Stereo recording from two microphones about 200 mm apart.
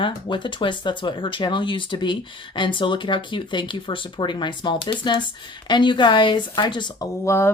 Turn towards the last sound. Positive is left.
turn(degrees=15)  # may be behind; listen again after turning